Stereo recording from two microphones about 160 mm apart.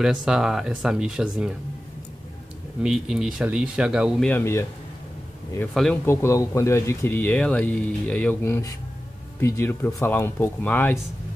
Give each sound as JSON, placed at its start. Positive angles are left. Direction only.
{"t": 0.0, "sound": "a man's voice", "side_deg": -5}
{"t": 2.8, "sound": "a man's voice", "side_deg": -5}
{"t": 4.3, "sound": "speech", "side_deg": 15}
{"t": 6.0, "sound": "speech", "side_deg": 15}